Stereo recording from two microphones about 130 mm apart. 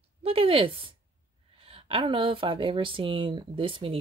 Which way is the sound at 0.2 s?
45° right (ahead or behind).